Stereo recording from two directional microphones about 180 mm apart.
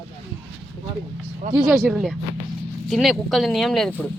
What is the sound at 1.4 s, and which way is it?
Speech, 45° right (ahead or behind).